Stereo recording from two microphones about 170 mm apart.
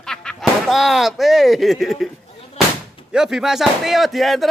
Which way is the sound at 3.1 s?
5° right (ahead or behind).